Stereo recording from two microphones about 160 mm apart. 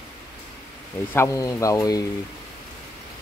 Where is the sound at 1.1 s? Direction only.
20° left (ahead or behind).